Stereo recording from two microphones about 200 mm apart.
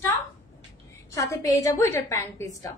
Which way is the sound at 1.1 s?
15° left (ahead or behind).